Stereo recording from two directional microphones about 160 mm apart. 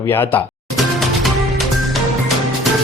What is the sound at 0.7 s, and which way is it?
Music, centre (ahead or behind).